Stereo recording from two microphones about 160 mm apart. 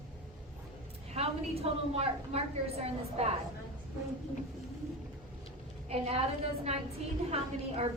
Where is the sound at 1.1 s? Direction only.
40° right (ahead or behind).